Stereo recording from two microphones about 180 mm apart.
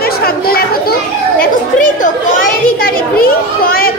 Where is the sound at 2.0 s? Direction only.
50° left (ahead or behind).